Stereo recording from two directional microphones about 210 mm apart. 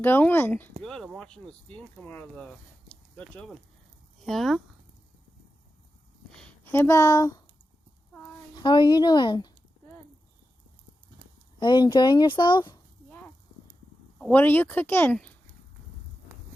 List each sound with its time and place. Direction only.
0.0 s a woman's voice: 10° left (ahead or behind)
6.3 s a sound: 5° left (ahead or behind)
8.5 s a woman's voice: 20° left (ahead or behind)
11.6 s a woman's voice: 20° left (ahead or behind)
13.1 s a sound: 10° left (ahead or behind)
14.2 s a woman's voice: 5° left (ahead or behind)